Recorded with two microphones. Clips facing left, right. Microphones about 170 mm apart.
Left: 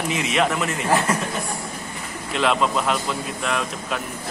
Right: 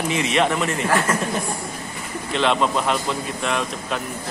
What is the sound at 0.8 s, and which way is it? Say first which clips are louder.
Speech: left 1 dB; 20° left (ahead or behind).